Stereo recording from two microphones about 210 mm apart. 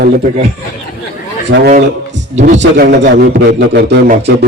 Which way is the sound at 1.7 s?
35° right (ahead or behind).